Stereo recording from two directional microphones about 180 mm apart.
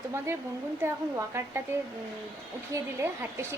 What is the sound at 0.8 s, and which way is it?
Speech, 15° right (ahead or behind).